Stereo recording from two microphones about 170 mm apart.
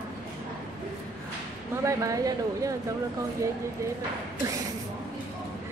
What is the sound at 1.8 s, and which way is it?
Speech, 20° right (ahead or behind).